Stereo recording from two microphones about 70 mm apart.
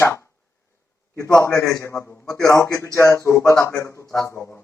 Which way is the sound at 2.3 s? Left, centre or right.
Left.